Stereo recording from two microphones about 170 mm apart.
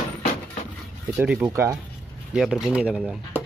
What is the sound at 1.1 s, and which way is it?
Speech, 10° right (ahead or behind).